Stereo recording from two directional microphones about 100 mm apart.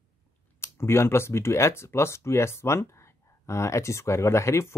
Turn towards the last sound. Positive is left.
turn(degrees=30)  # may be behind; listen again after turning